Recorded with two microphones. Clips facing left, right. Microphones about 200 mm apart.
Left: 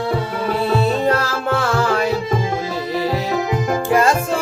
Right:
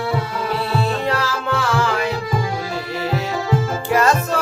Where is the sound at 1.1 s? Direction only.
40° left (ahead or behind).